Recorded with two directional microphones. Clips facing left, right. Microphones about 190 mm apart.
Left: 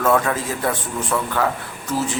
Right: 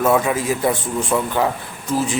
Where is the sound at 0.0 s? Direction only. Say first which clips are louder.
Right 2 dB; 10° right (ahead or behind).